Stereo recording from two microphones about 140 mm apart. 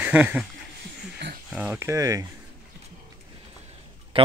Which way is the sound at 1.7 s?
20° right (ahead or behind).